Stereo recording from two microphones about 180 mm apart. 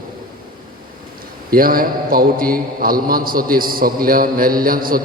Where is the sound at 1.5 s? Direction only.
55° right (ahead or behind).